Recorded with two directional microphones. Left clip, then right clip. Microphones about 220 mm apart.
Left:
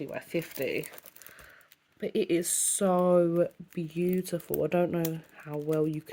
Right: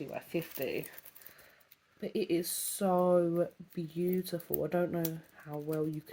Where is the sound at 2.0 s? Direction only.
25° left (ahead or behind).